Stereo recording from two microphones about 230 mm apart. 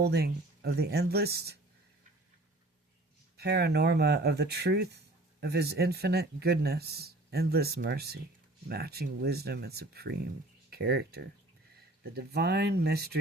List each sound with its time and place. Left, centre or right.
0.0 s speech: right
3.3 s speech: right